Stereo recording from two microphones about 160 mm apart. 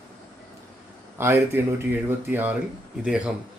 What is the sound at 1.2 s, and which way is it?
Speech, 15° right (ahead or behind).